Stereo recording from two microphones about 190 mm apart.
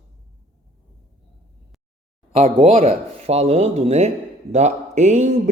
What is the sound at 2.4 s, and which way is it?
Speech, 30° right (ahead or behind).